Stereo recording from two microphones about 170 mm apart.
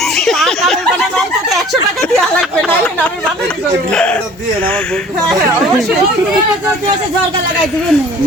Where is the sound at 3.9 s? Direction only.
5° left (ahead or behind).